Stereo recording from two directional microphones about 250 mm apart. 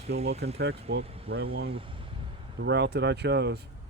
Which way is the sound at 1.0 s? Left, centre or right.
Right.